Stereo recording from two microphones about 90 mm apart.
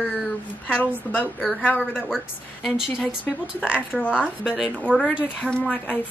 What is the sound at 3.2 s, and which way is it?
Speech, 15° left (ahead or behind).